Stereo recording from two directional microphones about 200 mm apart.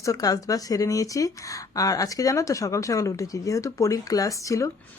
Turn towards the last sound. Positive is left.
turn(degrees=15)  # may be behind; listen again after turning